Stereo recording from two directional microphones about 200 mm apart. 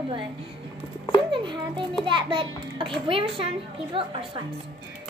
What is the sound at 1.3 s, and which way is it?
A child's voice, 25° right (ahead or behind).